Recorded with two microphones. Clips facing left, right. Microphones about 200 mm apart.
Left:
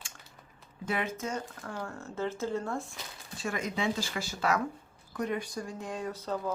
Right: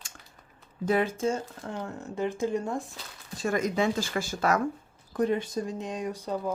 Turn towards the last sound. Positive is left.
turn(degrees=-15)  # may be behind; listen again after turning